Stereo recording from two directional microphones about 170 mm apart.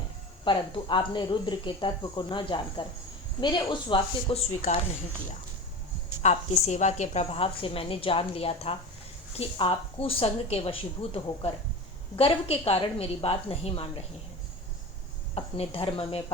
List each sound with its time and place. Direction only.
0.4 s speech: 30° left (ahead or behind)
4.7 s a woman's voice: 45° left (ahead or behind)
6.2 s a woman's voice: 40° left (ahead or behind)
15.4 s a woman's voice: 35° left (ahead or behind)